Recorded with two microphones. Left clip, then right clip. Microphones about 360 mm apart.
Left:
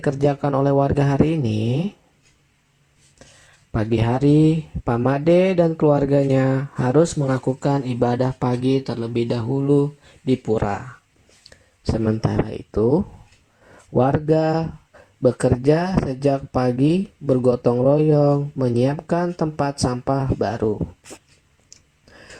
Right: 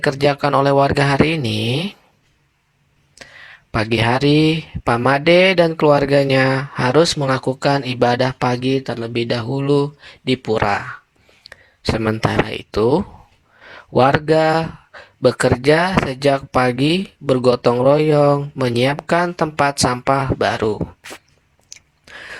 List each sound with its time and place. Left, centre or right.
0.0 s speech: right
3.7 s speech: right